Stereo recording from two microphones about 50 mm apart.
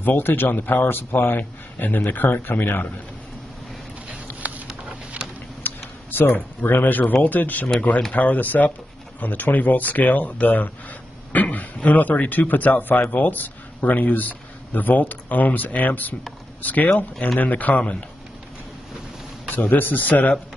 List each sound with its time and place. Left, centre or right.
0.0 s a man's voice: left
4.4 s patter: right
5.2 s a sound: right
5.6 s a sound: left
7.2 s speech: left
19.5 s speech: left